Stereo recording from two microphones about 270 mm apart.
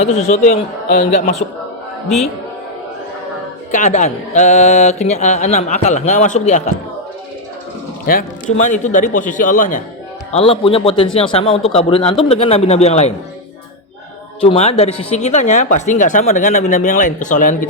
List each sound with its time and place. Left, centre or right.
0.0 s speech: left
3.7 s speech: left
8.1 s a man's voice: left
14.4 s speech: left